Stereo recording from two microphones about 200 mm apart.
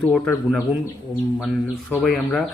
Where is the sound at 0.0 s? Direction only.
5° left (ahead or behind).